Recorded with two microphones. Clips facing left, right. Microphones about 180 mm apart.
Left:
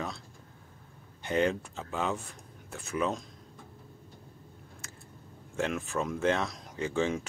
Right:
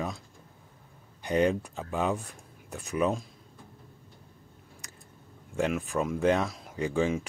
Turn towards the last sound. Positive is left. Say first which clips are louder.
# right 2 dB
turn(degrees=-10)  # may be behind; listen again after turning